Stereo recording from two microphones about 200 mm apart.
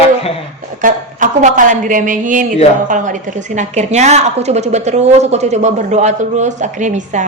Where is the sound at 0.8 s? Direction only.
40° right (ahead or behind).